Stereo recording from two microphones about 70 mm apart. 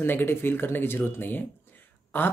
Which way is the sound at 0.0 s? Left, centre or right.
Left.